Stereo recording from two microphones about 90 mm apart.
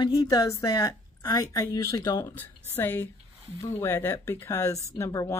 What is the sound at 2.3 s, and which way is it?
Speech, 25° left (ahead or behind).